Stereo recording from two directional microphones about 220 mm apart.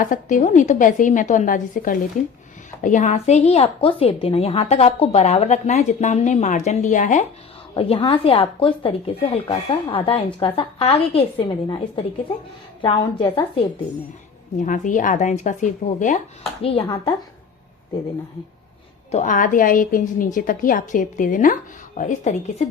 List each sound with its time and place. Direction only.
0.0 s a woman's voice: 35° left (ahead or behind)
7.7 s a woman's voice: 25° left (ahead or behind)
14.6 s a woman's voice: 35° left (ahead or behind)
16.6 s a woman's voice: 25° left (ahead or behind)
19.1 s a woman's voice: 35° left (ahead or behind)